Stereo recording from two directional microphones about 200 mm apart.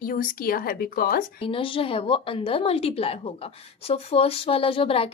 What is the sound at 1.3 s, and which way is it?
A woman's voice, 25° left (ahead or behind).